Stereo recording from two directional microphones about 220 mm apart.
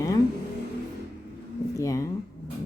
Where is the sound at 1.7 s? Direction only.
15° left (ahead or behind).